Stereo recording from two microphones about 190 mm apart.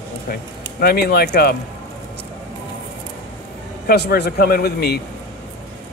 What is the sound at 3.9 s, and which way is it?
Speech, 55° left (ahead or behind).